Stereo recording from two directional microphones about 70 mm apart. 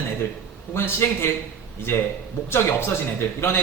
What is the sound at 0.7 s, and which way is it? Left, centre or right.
Speech, left.